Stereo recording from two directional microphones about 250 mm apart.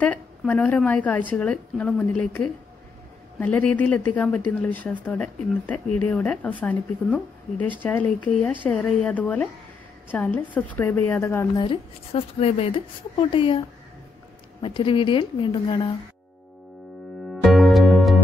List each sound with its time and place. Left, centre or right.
0.0 s a woman's voice: centre
14.6 s a woman's voice: centre
17.3 s music: centre